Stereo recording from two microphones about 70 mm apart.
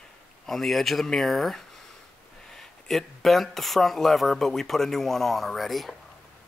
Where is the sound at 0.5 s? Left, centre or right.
Centre.